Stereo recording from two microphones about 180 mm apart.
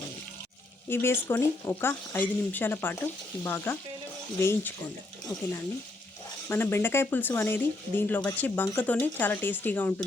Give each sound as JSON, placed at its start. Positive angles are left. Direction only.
{"t": 0.9, "sound": "speech", "side_deg": 15}
{"t": 6.5, "sound": "speech", "side_deg": 10}